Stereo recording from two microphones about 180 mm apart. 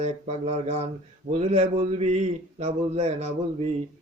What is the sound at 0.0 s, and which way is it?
A man's voice, 35° right (ahead or behind).